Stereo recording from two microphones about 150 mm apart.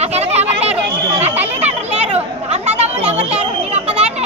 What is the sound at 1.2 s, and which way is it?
Chatter, 45° right (ahead or behind).